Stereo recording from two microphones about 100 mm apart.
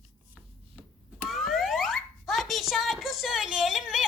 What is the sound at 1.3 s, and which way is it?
Alarm, centre (ahead or behind).